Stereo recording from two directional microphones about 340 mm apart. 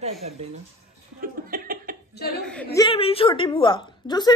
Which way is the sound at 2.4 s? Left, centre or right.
Centre.